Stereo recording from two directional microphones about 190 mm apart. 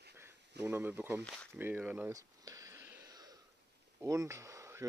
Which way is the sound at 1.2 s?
5° left (ahead or behind).